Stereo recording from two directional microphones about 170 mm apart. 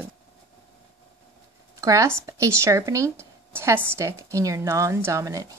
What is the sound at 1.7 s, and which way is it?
Speech, 20° right (ahead or behind).